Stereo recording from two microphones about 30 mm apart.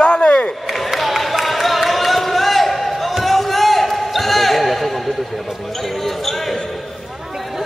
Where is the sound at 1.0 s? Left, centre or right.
Centre.